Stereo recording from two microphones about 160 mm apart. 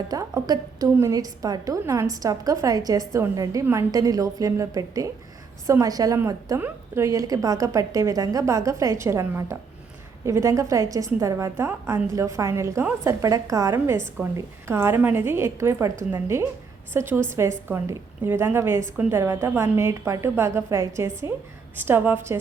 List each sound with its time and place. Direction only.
0.1 s a woman's voice: 20° right (ahead or behind)